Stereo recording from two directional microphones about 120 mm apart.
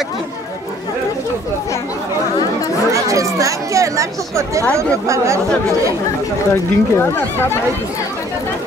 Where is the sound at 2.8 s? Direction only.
25° right (ahead or behind).